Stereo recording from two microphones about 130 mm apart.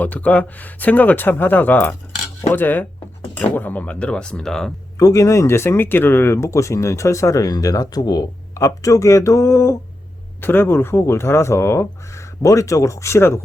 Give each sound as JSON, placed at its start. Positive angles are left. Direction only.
{"t": 0.0, "sound": "speech", "side_deg": 10}
{"t": 4.9, "sound": "speech", "side_deg": 25}